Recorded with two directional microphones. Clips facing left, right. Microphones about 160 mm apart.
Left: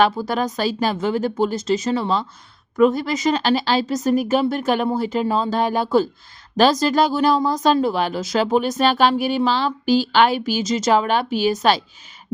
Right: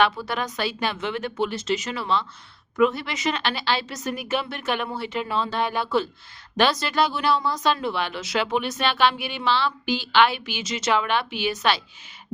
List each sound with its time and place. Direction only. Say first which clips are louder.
0.0 s a woman's voice: left 5 dB; 40° left (ahead or behind)